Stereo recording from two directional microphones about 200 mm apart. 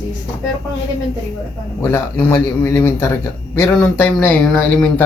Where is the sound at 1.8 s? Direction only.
10° left (ahead or behind).